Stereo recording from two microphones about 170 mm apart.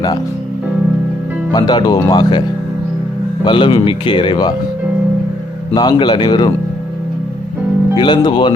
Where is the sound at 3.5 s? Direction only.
30° left (ahead or behind).